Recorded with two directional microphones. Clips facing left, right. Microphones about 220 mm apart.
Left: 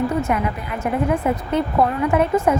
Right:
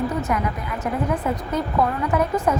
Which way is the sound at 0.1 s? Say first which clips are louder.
Left 3 dB; 25° left (ahead or behind).